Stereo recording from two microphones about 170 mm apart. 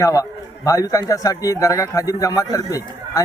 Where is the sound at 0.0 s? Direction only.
20° left (ahead or behind).